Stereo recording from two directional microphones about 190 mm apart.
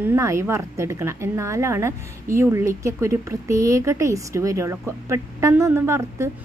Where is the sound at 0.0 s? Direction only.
15° right (ahead or behind).